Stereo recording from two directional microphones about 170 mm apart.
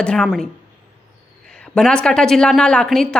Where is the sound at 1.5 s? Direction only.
5° left (ahead or behind).